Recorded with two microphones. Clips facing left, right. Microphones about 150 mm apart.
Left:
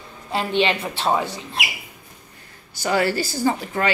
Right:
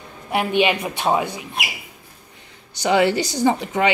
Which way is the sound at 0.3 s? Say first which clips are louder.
Right 2 dB; 15° right (ahead or behind).